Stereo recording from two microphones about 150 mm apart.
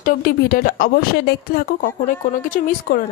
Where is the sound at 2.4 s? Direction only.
65° left (ahead or behind).